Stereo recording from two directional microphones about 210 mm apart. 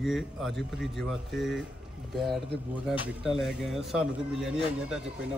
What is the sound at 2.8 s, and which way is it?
Speech, 5° right (ahead or behind).